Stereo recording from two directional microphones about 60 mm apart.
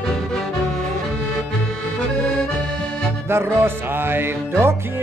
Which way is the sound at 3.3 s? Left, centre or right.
Right.